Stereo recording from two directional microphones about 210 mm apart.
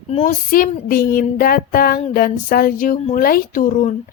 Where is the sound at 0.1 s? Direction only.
35° left (ahead or behind).